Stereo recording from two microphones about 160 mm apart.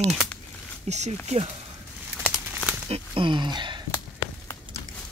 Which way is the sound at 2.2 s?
5° right (ahead or behind).